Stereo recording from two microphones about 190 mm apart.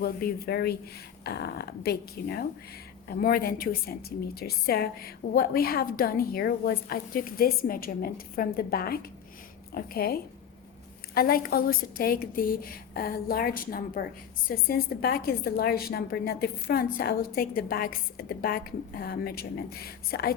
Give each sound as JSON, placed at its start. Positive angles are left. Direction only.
{"t": 0.0, "sound": "a woman's voice", "side_deg": 55}